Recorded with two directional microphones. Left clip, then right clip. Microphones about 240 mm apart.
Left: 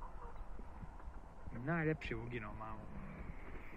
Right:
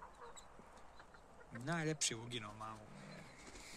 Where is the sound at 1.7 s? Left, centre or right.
Right.